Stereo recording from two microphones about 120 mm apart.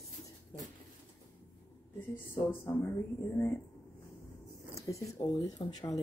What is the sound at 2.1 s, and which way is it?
Speech, 20° left (ahead or behind).